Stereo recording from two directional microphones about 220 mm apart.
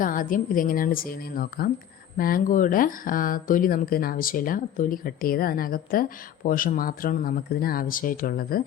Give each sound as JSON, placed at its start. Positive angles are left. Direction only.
{"t": 0.0, "sound": "speech", "side_deg": 40}